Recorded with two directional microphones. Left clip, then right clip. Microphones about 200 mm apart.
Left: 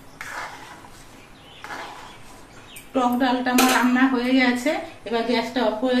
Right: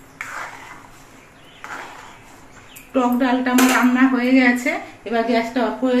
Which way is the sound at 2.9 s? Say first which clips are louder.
Right 2 dB; 45° right (ahead or behind).